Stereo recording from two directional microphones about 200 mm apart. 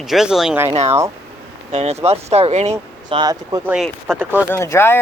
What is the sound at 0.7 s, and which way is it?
Speech, 30° right (ahead or behind).